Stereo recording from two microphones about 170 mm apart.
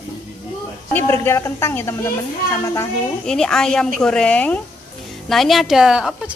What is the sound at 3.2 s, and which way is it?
A woman's voice, 5° left (ahead or behind).